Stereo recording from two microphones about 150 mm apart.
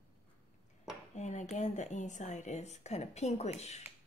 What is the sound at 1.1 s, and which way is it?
A woman's voice, 50° left (ahead or behind).